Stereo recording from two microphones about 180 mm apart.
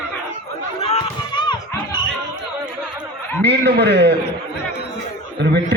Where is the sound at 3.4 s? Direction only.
70° right (ahead or behind).